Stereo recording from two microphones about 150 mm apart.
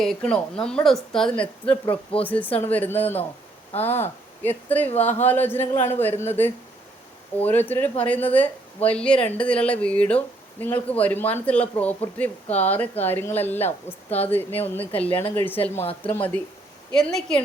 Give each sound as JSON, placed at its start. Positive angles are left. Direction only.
{"t": 0.0, "sound": "speech", "side_deg": 0}
{"t": 1.7, "sound": "speech", "side_deg": 35}
{"t": 2.5, "sound": "speech", "side_deg": 10}